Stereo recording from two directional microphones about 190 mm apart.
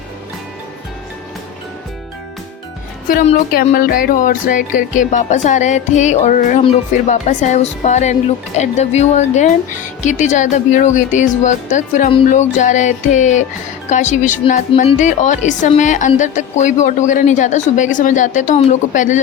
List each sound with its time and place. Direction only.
3.5 s a woman's voice: 50° left (ahead or behind)